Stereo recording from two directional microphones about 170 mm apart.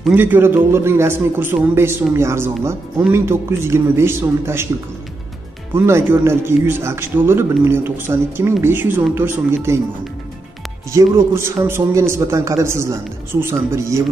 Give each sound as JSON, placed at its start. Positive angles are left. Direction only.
{"t": 0.0, "sound": "a man's voice", "side_deg": -10}
{"t": 5.8, "sound": "a man's voice", "side_deg": -15}
{"t": 10.9, "sound": "a man's voice", "side_deg": -20}